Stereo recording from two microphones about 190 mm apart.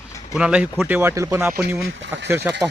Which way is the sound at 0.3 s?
5° right (ahead or behind).